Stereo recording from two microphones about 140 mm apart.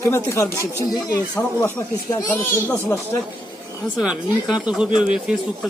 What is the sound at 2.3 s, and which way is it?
Speech, 15° left (ahead or behind).